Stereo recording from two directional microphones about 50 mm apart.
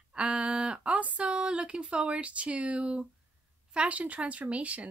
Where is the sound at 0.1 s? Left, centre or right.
Centre.